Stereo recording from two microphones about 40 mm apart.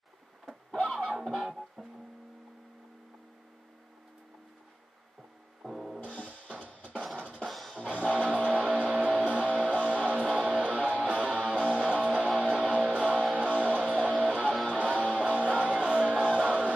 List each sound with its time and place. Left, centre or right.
0.7 s music: centre
1.8 s music: centre
5.6 s music: centre
5.9 s music: left
7.4 s music: centre
7.8 s music: right